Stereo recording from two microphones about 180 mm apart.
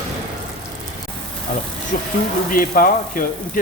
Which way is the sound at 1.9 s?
45° left (ahead or behind).